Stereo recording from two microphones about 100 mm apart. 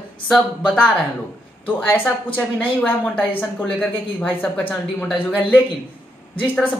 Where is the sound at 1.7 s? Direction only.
20° left (ahead or behind).